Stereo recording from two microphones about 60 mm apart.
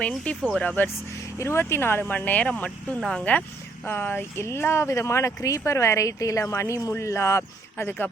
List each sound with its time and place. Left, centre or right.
0.3 s speech: left
1.2 s speech: left
3.0 s speech: centre
3.8 s speech: left
7.9 s speech: left